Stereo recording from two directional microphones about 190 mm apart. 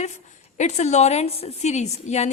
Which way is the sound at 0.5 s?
40° left (ahead or behind).